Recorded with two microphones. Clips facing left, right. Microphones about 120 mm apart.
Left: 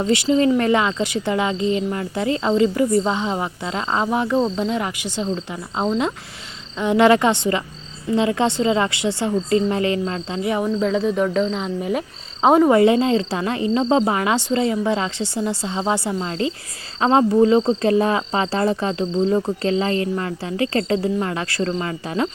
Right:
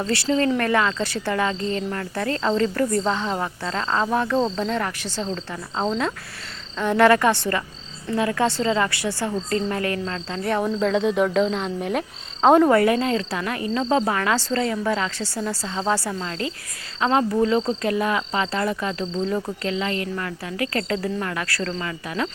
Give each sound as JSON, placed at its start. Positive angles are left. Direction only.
{"t": 0.1, "sound": "speech", "side_deg": 15}
{"t": 4.4, "sound": "speech", "side_deg": 5}
{"t": 12.7, "sound": "speech", "side_deg": 20}